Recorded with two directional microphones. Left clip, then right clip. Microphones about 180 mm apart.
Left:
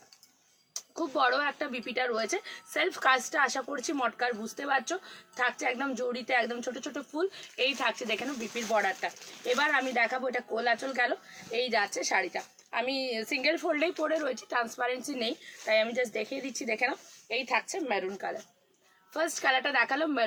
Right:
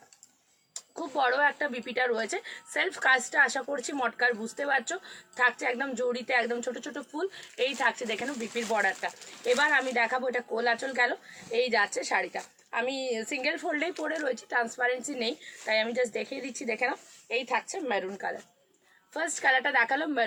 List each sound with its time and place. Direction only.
0.9 s a woman's voice: 20° left (ahead or behind)